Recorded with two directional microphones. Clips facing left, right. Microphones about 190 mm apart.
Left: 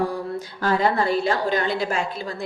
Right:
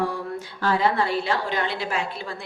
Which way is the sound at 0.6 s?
45° left (ahead or behind).